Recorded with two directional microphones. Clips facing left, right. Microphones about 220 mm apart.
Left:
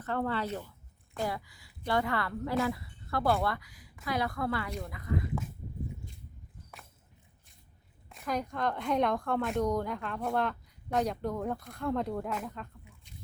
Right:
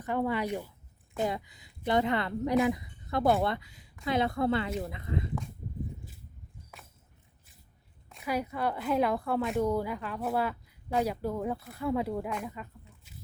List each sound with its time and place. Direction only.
0.0 s a woman's voice: 15° right (ahead or behind)
8.1 s a woman's voice: 5° right (ahead or behind)